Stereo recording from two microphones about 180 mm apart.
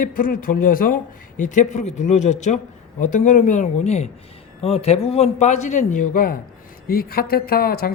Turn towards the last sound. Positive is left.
turn(degrees=55)  # may be behind; listen again after turning